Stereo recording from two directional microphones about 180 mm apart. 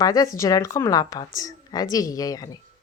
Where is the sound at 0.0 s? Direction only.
20° left (ahead or behind).